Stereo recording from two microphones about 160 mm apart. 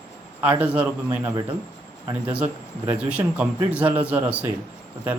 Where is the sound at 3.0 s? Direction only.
10° right (ahead or behind).